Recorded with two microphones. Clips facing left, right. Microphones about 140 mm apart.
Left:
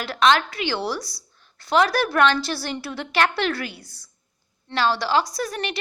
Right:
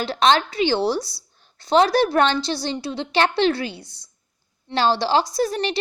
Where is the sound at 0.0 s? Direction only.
30° right (ahead or behind).